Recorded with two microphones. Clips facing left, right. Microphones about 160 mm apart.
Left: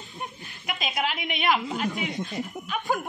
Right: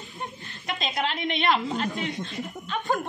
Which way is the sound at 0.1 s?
15° left (ahead or behind).